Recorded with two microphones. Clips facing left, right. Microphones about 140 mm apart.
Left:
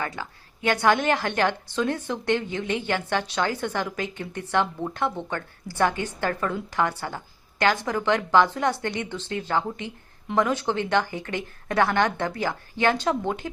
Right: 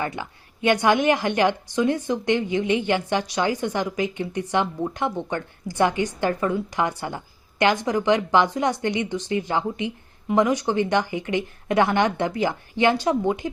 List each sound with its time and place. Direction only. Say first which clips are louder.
0.0 s a woman's voice: right 3 dB; 20° right (ahead or behind)